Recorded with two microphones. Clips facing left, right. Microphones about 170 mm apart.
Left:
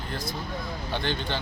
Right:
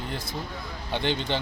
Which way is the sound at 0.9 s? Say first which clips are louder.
Right 3 dB; 20° right (ahead or behind).